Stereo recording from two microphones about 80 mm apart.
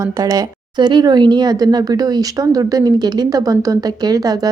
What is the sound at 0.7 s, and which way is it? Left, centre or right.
Speech, right.